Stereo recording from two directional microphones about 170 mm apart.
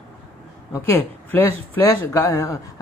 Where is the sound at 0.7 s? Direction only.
15° left (ahead or behind).